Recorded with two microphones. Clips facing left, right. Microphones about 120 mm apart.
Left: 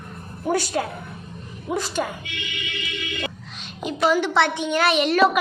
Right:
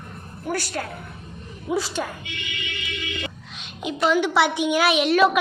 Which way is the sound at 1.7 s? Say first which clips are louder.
Right 1 dB; centre (ahead or behind).